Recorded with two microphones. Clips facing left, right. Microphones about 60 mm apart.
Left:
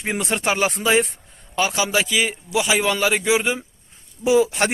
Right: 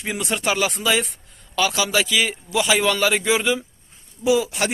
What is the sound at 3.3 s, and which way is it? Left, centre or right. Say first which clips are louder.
Speech: even; left.